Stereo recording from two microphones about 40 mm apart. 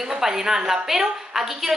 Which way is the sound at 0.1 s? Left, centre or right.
Centre.